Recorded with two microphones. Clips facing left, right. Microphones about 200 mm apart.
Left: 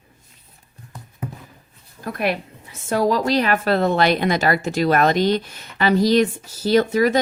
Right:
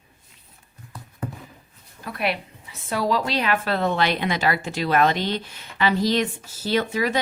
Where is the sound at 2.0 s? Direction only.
45° left (ahead or behind).